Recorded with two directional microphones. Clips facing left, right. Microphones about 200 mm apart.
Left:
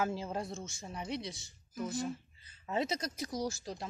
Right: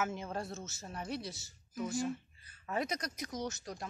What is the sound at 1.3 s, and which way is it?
Speech, centre (ahead or behind).